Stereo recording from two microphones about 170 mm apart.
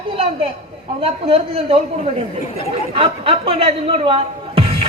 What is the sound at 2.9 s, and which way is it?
Music, 35° right (ahead or behind).